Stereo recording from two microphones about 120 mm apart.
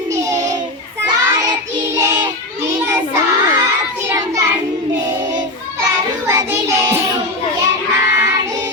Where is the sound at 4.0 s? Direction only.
25° right (ahead or behind).